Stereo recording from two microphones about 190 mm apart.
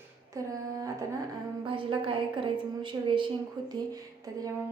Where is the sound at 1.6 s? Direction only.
25° right (ahead or behind).